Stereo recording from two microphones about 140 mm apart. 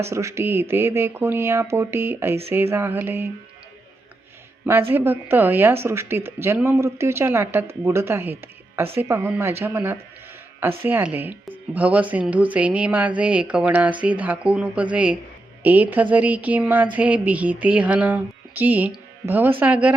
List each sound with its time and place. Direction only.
0.0 s speech: 20° right (ahead or behind)
4.6 s speech: 15° right (ahead or behind)